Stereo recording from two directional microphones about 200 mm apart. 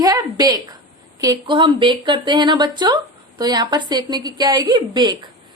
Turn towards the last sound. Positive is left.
turn(degrees=-20)  # may be behind; listen again after turning